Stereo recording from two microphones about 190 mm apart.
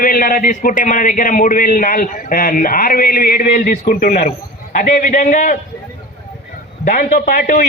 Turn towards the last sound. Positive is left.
turn(degrees=50)  # may be behind; listen again after turning